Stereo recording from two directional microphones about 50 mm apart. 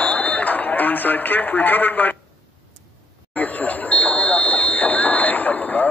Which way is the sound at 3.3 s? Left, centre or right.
Left.